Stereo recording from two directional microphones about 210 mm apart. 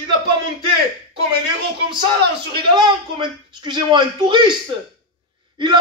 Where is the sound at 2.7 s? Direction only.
20° right (ahead or behind).